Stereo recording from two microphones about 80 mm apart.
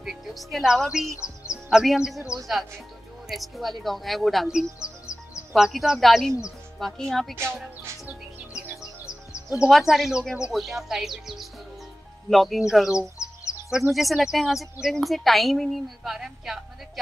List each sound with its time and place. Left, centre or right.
0.0 s speech: centre
4.8 s music: left
5.5 s speech: centre
9.5 s speech: centre